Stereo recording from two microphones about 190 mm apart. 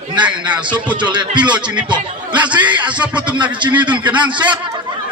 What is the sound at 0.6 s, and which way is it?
A man's voice, 25° right (ahead or behind).